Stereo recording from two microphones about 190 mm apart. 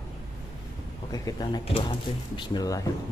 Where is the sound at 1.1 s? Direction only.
20° left (ahead or behind).